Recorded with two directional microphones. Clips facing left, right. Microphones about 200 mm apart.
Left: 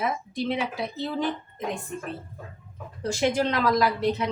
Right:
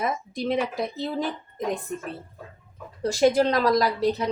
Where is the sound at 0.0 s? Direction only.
45° right (ahead or behind).